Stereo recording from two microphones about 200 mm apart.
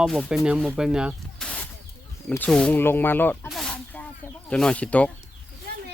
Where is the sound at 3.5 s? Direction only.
Centre (ahead or behind).